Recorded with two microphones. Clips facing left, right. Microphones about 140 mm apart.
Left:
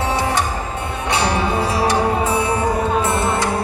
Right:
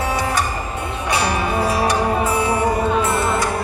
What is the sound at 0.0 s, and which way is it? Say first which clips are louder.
Music: left 1 dB; 25° left (ahead or behind).